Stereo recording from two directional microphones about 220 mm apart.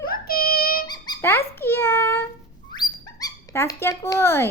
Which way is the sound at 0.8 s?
20° left (ahead or behind).